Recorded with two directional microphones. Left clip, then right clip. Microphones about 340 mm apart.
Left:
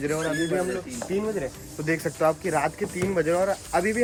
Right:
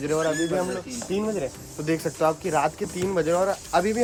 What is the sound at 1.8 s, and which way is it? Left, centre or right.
Speech, centre.